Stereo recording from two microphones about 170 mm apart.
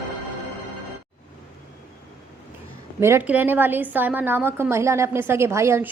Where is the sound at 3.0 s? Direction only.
15° right (ahead or behind).